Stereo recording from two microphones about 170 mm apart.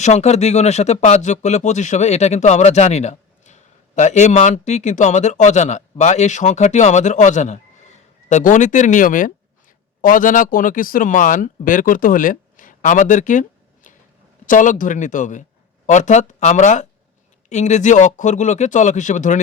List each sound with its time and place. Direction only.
0.0 s speech: 40° left (ahead or behind)
13.9 s a sound: 50° left (ahead or behind)
14.4 s speech: 50° left (ahead or behind)